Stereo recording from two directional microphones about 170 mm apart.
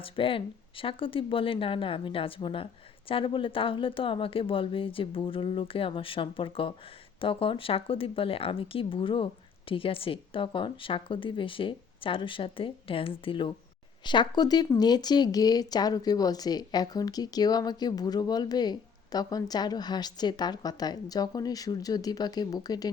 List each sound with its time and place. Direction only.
0.0 s speech: 30° left (ahead or behind)